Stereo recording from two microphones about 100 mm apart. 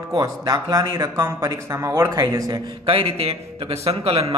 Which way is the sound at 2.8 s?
70° right (ahead or behind).